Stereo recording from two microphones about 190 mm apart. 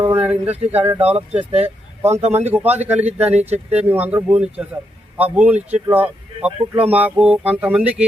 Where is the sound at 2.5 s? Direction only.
10° right (ahead or behind).